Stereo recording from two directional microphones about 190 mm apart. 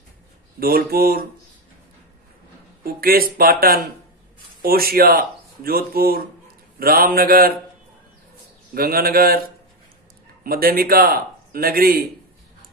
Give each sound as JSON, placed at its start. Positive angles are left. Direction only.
{"t": 0.6, "sound": "speech", "side_deg": -50}
{"t": 2.8, "sound": "speech", "side_deg": -50}
{"t": 8.7, "sound": "speech", "side_deg": -50}
{"t": 10.4, "sound": "speech", "side_deg": -50}